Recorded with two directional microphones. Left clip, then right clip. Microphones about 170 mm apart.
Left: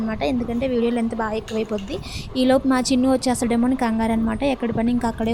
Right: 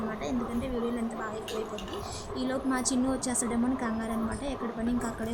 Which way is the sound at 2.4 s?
40° left (ahead or behind).